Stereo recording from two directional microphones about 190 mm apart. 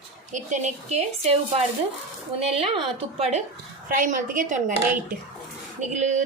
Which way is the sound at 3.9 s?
45° right (ahead or behind).